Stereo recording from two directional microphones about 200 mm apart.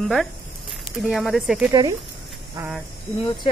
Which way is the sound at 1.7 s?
20° right (ahead or behind).